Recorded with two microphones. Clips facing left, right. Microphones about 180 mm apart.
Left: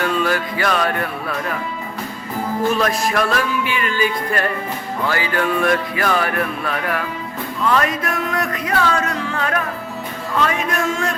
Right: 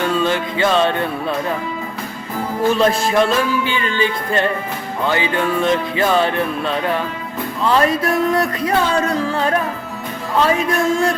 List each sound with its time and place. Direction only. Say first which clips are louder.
0.0 s speech: right 2 dB; 25° right (ahead or behind)
2.7 s speech: right 4 dB; 25° right (ahead or behind)
7.6 s music: right 3 dB; 30° right (ahead or behind)